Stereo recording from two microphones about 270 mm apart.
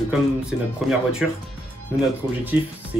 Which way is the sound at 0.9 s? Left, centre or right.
Centre.